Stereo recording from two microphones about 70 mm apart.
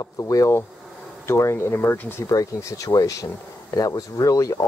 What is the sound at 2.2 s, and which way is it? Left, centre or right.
Speech, left.